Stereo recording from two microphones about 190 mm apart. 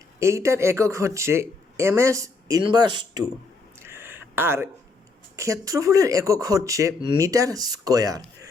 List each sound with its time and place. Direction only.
0.2 s speech: 15° right (ahead or behind)
3.8 s a sound: 10° right (ahead or behind)
5.4 s speech: 15° right (ahead or behind)